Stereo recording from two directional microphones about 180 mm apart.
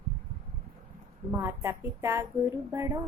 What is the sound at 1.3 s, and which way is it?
A woman's voice, 15° right (ahead or behind).